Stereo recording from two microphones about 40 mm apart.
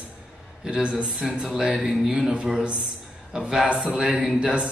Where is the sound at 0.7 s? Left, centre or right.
Right.